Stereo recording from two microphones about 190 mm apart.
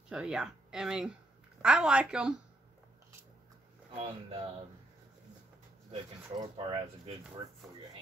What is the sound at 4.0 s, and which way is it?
Speech, 30° right (ahead or behind).